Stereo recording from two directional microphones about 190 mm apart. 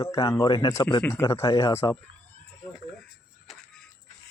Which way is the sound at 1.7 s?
15° left (ahead or behind).